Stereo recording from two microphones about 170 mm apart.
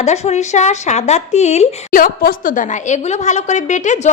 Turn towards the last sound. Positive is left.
turn(degrees=45)  # may be behind; listen again after turning